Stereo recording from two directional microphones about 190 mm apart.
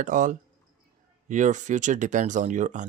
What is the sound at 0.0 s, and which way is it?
Speech, 45° right (ahead or behind).